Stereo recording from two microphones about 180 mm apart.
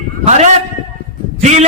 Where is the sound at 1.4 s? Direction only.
40° right (ahead or behind).